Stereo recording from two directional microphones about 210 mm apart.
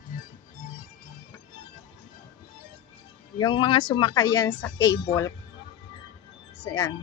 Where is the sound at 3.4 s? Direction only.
20° left (ahead or behind).